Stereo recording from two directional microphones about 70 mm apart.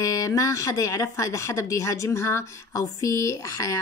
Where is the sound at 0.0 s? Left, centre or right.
Left.